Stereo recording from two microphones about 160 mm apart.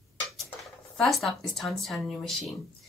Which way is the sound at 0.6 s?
Centre (ahead or behind).